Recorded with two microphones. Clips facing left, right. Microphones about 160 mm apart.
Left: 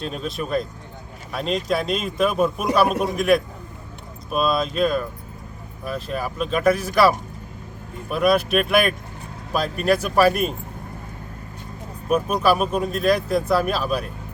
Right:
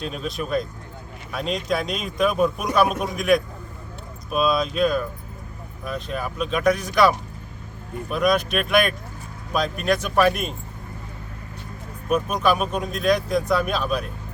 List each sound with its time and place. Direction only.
0.0 s a man's voice: centre (ahead or behind)
12.0 s a man's voice: 5° left (ahead or behind)